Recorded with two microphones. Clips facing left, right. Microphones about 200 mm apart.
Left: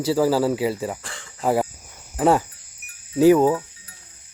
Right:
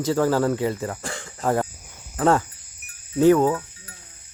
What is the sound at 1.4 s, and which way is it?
Speech, 10° left (ahead or behind).